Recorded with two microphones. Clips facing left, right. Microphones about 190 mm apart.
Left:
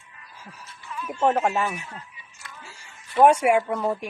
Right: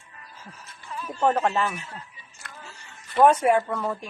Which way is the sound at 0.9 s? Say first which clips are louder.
Left 1 dB; 35° right (ahead or behind).